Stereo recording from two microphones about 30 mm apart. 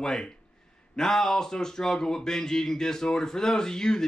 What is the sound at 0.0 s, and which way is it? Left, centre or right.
Speech, left.